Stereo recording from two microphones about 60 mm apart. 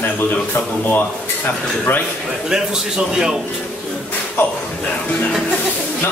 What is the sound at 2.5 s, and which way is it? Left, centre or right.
Speech, centre.